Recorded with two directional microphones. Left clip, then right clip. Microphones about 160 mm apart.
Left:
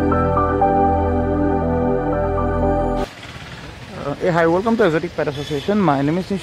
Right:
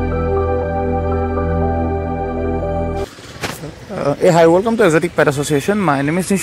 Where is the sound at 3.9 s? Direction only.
25° right (ahead or behind).